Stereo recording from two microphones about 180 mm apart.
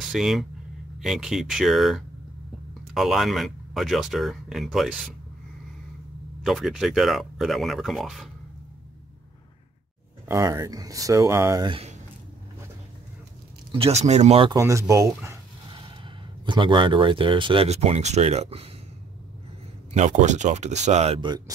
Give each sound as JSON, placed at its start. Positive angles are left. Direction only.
{"t": 0.1, "sound": "speech", "side_deg": 0}
{"t": 6.4, "sound": "speech", "side_deg": 0}
{"t": 10.2, "sound": "speech", "side_deg": -15}
{"t": 13.7, "sound": "speech", "side_deg": -35}
{"t": 14.5, "sound": "speech", "side_deg": -15}
{"t": 16.4, "sound": "speech", "side_deg": -25}
{"t": 19.9, "sound": "speech", "side_deg": -40}